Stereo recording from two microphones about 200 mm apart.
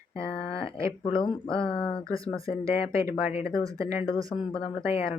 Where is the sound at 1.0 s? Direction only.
25° left (ahead or behind).